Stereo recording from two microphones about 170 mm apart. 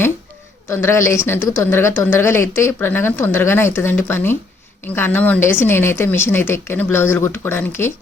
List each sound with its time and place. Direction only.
0.7 s speech: 15° left (ahead or behind)